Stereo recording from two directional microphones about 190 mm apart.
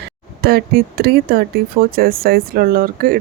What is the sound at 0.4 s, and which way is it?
Speech, 50° right (ahead or behind).